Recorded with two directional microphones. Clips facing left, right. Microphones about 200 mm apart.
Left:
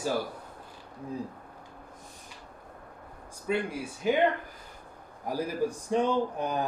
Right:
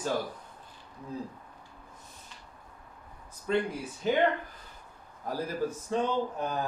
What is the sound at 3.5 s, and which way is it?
Speech, 10° left (ahead or behind).